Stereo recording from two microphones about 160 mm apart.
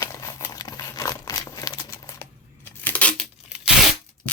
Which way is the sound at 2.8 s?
10° left (ahead or behind).